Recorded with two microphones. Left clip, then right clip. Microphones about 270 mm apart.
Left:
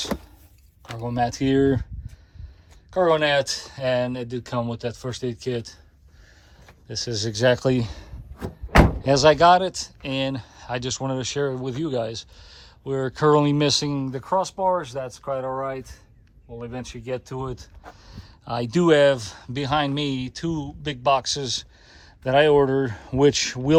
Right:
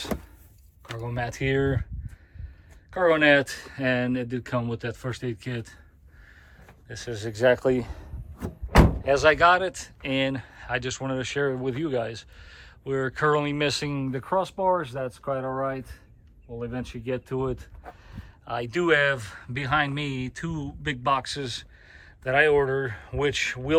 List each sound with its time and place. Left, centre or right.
1.1 s speech: centre
2.9 s speech: centre
6.9 s speech: centre
8.4 s door: centre
9.0 s speech: left